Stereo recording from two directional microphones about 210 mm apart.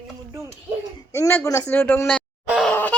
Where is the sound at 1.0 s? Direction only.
15° left (ahead or behind).